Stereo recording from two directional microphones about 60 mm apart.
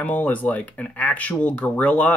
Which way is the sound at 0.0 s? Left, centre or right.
Left.